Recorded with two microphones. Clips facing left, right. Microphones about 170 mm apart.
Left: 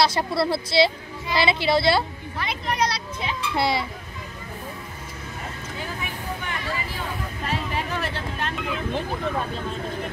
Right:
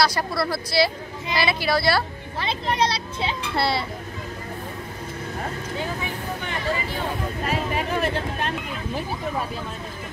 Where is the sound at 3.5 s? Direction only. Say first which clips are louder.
Left 1 dB; 15° left (ahead or behind).